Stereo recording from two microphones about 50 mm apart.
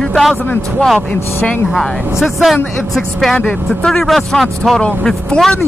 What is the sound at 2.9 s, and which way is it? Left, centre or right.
A man's voice, centre.